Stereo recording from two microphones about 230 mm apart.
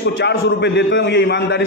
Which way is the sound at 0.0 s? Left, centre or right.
Left.